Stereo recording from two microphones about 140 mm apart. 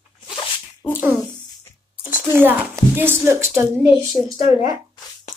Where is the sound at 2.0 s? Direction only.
15° right (ahead or behind).